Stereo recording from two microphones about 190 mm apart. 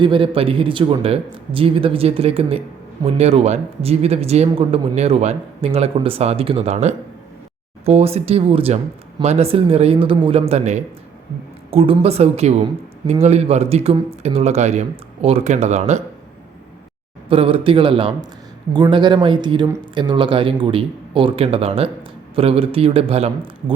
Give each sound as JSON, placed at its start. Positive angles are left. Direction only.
{"t": 0.0, "sound": "speech", "side_deg": -25}
{"t": 17.2, "sound": "speech", "side_deg": -30}